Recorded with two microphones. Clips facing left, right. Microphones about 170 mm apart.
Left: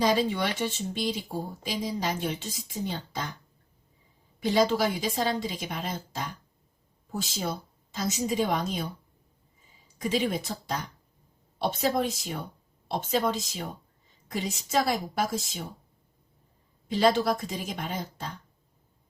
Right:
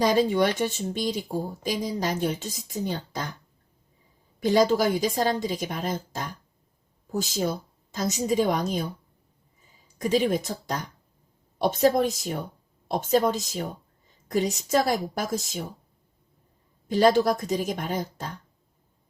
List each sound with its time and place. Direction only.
0.0 s speech: 45° right (ahead or behind)
4.4 s speech: 45° right (ahead or behind)
10.0 s speech: 45° right (ahead or behind)
16.9 s speech: 45° right (ahead or behind)